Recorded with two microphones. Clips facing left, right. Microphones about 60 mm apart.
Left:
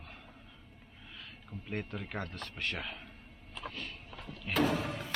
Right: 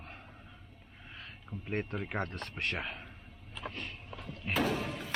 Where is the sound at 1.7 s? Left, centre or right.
Right.